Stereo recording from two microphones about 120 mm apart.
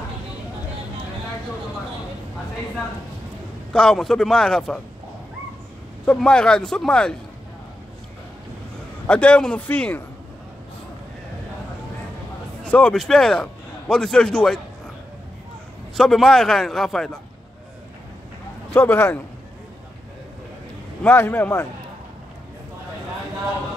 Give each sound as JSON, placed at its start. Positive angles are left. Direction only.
{"t": 3.7, "sound": "a man's voice", "side_deg": 5}
{"t": 6.0, "sound": "speech", "side_deg": 5}
{"t": 9.0, "sound": "speech", "side_deg": 10}
{"t": 12.6, "sound": "a man's voice", "side_deg": 10}
{"t": 16.0, "sound": "a man's voice", "side_deg": 5}
{"t": 18.7, "sound": "speech", "side_deg": 20}
{"t": 21.0, "sound": "a man's voice", "side_deg": 15}